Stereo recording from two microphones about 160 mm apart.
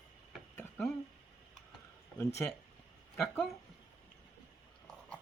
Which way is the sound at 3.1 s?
Centre (ahead or behind).